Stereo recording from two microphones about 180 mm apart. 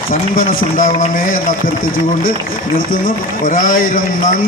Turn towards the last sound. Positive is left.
turn(degrees=50)  # may be behind; listen again after turning